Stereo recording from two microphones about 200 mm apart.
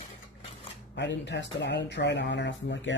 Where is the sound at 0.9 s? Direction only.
60° left (ahead or behind).